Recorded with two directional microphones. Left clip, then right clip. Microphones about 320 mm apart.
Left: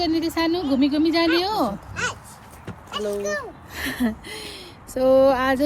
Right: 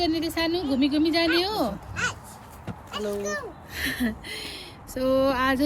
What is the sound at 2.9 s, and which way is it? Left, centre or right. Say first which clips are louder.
Speech: left 4 dB; centre.